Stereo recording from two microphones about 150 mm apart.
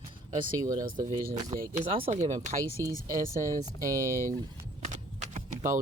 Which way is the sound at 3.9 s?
20° right (ahead or behind).